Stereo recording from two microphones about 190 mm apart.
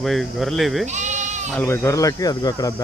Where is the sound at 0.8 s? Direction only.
40° right (ahead or behind).